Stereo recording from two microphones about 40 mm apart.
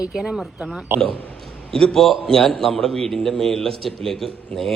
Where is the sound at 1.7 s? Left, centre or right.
Centre.